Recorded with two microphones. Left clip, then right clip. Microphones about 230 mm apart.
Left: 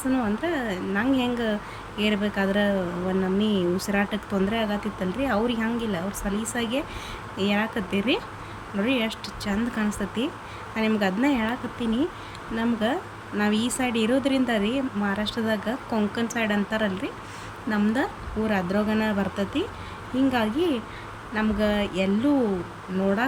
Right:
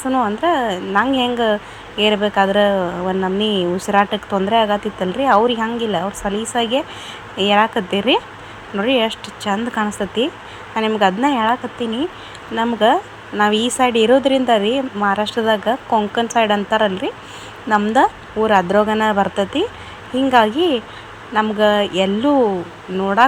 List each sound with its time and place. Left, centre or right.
0.1 s a woman's voice: centre